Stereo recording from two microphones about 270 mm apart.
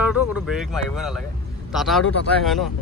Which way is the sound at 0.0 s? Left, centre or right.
Centre.